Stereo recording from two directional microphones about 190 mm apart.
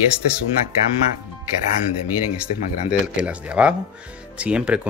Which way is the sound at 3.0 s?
5° right (ahead or behind).